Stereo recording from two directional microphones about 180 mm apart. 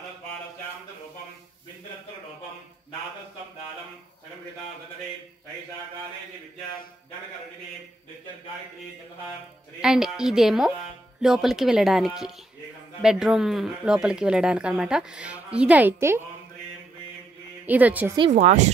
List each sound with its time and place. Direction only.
9.8 s speech: 5° right (ahead or behind)
17.6 s speech: 10° right (ahead or behind)
18.3 s speech: 40° right (ahead or behind)